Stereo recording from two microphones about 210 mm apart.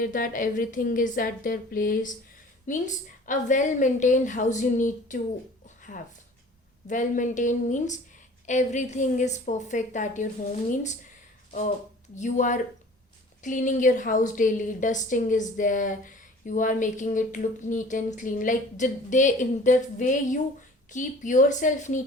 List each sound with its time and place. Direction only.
0.0 s a woman's voice: 40° left (ahead or behind)
5.6 s a sound: 40° left (ahead or behind)
6.8 s a woman's voice: 35° left (ahead or behind)
12.1 s a woman's voice: 35° left (ahead or behind)